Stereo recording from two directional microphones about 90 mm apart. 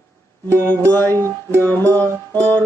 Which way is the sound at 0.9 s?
20° left (ahead or behind).